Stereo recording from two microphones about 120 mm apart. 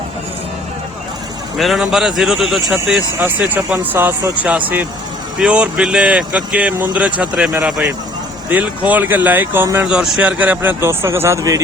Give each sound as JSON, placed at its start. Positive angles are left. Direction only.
{"t": 1.5, "sound": "speech", "side_deg": 0}
{"t": 3.2, "sound": "speech", "side_deg": -15}
{"t": 9.8, "sound": "speech", "side_deg": -5}